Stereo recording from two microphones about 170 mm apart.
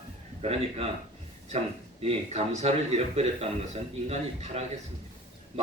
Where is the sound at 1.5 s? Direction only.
35° right (ahead or behind).